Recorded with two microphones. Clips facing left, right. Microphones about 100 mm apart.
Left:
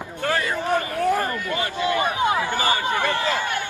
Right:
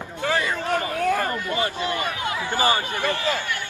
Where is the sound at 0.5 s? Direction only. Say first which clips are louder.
Left 2 dB; 15° left (ahead or behind).